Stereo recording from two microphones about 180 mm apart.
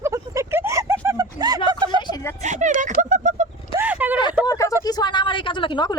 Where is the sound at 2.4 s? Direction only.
40° right (ahead or behind).